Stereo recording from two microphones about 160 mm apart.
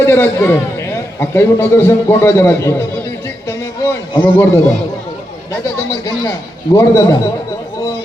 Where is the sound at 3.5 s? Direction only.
20° left (ahead or behind).